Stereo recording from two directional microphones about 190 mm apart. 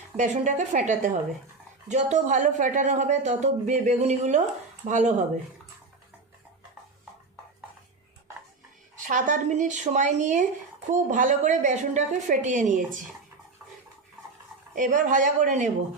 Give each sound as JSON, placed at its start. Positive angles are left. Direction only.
{"t": 0.2, "sound": "speech", "side_deg": -40}
{"t": 9.0, "sound": "speech", "side_deg": -40}
{"t": 14.8, "sound": "a man's voice", "side_deg": -45}